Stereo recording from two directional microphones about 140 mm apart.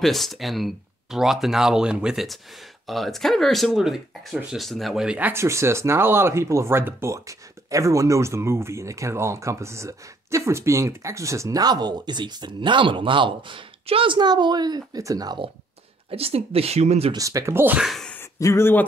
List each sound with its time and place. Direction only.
0.0 s speech: centre (ahead or behind); by 15.5 s 30° right (ahead or behind)
16.1 s speech: 45° right (ahead or behind)
17.1 s speech: 25° right (ahead or behind)
17.7 s speech: centre (ahead or behind)
18.1 s a sound: 20° left (ahead or behind)